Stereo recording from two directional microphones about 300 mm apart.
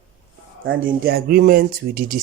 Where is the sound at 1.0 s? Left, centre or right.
Right.